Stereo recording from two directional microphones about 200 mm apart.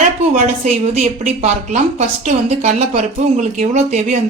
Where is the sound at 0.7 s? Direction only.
35° right (ahead or behind).